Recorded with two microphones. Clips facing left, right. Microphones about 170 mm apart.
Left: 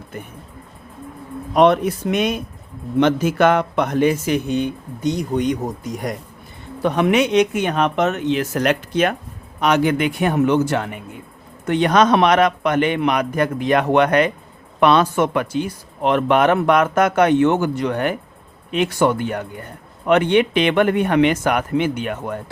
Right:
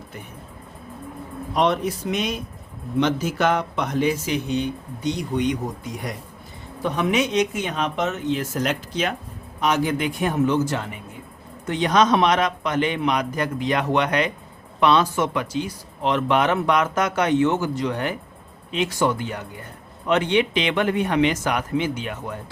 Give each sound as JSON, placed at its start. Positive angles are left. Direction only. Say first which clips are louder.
{"t": 1.5, "sound": "speech", "louder": "left 7 dB", "side_deg": 55}
{"t": 6.8, "sound": "speech", "louder": "left 5 dB", "side_deg": 65}